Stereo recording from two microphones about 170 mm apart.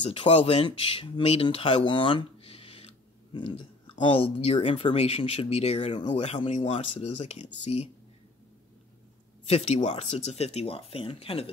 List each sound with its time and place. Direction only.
0.0 s speech: 35° left (ahead or behind)
4.1 s speech: 35° left (ahead or behind)
9.5 s speech: 40° left (ahead or behind)